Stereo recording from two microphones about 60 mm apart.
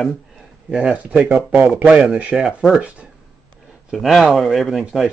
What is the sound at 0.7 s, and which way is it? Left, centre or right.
Speech, centre.